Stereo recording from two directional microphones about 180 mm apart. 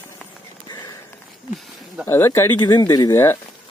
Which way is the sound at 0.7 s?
20° left (ahead or behind).